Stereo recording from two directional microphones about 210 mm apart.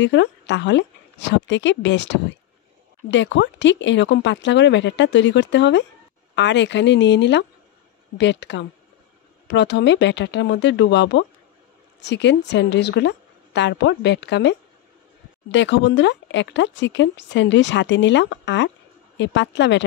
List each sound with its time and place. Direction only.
0.0 s speech: 55° left (ahead or behind)